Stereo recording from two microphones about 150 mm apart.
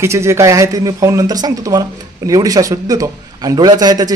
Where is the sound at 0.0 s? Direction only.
20° right (ahead or behind).